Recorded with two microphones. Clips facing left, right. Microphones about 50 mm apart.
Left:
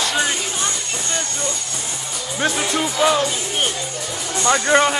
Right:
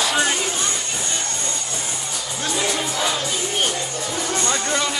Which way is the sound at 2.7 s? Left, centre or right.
Centre.